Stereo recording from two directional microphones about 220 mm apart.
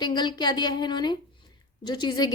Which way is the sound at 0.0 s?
20° left (ahead or behind).